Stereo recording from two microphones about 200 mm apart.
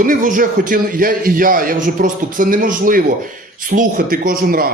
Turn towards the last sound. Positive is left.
turn(degrees=-45)  # may be behind; listen again after turning